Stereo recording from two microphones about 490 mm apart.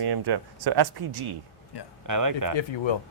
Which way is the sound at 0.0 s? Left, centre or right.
Right.